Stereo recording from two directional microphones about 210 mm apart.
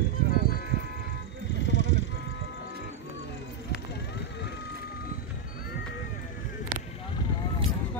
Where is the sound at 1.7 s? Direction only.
60° left (ahead or behind).